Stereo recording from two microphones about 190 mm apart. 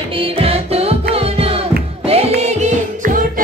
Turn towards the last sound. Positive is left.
turn(degrees=-45)  # may be behind; listen again after turning